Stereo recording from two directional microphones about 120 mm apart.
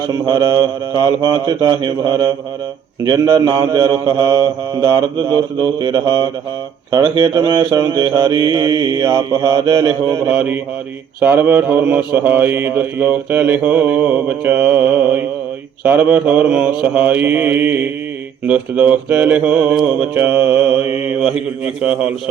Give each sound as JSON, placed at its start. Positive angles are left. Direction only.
{"t": 0.1, "sound": "mantra", "side_deg": -35}
{"t": 10.3, "sound": "mantra", "side_deg": -15}